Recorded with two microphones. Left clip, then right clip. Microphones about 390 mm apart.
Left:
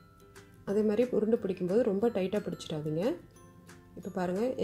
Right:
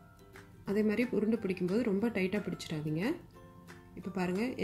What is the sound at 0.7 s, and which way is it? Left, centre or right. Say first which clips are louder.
Speech: left 4 dB; centre.